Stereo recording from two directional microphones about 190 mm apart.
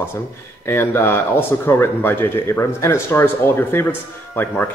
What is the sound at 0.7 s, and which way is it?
Speech, 10° left (ahead or behind).